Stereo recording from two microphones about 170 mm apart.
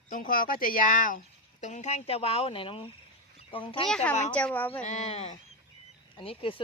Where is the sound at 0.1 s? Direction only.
55° left (ahead or behind); by 3.8 s 30° left (ahead or behind).